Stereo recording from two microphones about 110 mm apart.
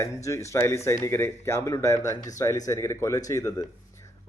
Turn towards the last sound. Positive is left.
turn(degrees=30)  # may be behind; listen again after turning